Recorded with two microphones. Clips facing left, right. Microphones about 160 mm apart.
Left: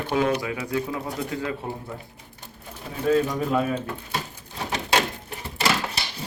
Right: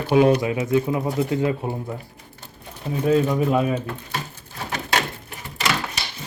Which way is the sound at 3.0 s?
15° right (ahead or behind).